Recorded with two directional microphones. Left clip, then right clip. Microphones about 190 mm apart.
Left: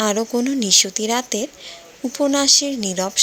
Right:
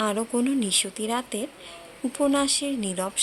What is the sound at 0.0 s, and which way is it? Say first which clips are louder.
Speech: left 6 dB; 20° left (ahead or behind).